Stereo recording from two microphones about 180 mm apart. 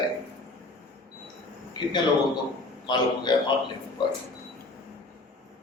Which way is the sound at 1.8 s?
25° left (ahead or behind).